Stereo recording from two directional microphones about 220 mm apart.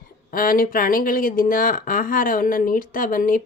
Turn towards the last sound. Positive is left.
turn(degrees=40)  # may be behind; listen again after turning